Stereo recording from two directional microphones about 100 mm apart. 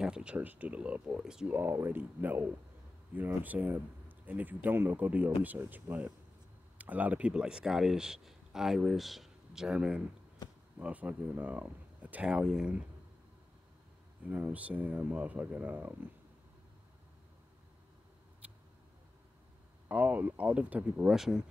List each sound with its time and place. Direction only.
0.0 s speech: 10° right (ahead or behind)
1.5 s speech: 20° right (ahead or behind)
14.2 s speech: 15° right (ahead or behind)
18.4 s vehicle: 15° right (ahead or behind)
19.9 s speech: 15° right (ahead or behind)